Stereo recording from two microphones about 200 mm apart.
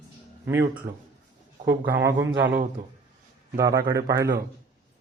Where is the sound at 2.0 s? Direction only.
15° right (ahead or behind).